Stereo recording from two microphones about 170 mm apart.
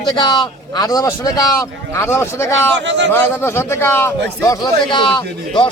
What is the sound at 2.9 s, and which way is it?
Speech, 90° right.